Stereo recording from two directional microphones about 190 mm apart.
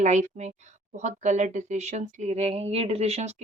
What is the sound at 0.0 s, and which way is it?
Speech, 40° right (ahead or behind).